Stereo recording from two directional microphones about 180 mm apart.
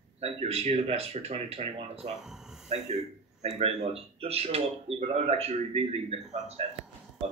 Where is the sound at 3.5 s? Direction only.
35° right (ahead or behind).